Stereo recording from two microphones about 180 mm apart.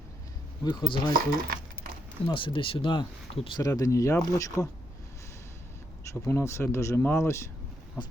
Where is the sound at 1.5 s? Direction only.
55° right (ahead or behind).